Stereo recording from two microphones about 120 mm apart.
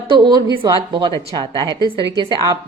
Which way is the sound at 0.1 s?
40° right (ahead or behind).